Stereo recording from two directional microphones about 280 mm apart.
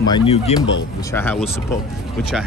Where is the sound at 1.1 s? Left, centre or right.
Centre.